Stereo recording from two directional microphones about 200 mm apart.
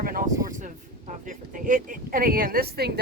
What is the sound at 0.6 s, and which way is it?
Speech, 40° right (ahead or behind).